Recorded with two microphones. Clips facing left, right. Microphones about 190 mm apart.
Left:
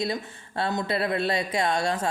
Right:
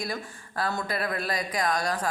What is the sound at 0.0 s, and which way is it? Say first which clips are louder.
Speech: left 5 dB; 25° left (ahead or behind).